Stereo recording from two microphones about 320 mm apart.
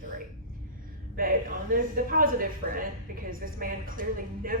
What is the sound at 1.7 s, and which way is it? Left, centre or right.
A woman's voice, right.